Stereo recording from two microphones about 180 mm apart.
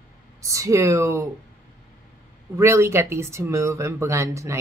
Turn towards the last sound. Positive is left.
turn(degrees=-15)  # may be behind; listen again after turning